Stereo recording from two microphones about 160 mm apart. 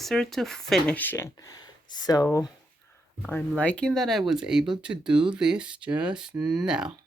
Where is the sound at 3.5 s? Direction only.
5° left (ahead or behind).